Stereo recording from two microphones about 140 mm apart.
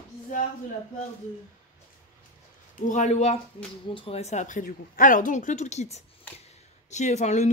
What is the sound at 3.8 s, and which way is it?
Speech, 40° left (ahead or behind).